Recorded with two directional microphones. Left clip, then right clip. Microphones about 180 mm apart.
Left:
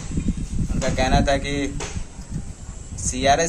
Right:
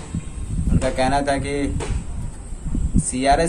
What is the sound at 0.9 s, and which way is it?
Speech, 5° left (ahead or behind).